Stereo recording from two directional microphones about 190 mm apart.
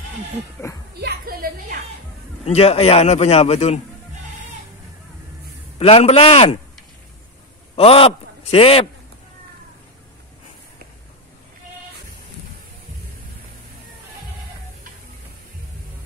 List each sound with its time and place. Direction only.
1.0 s a woman's voice: 50° right (ahead or behind)
2.4 s a man's voice: 30° left (ahead or behind)
5.8 s a man's voice: 30° left (ahead or behind)
7.7 s a man's voice: 30° left (ahead or behind)